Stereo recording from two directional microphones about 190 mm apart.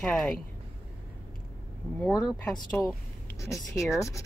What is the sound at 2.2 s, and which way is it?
Speech, centre (ahead or behind).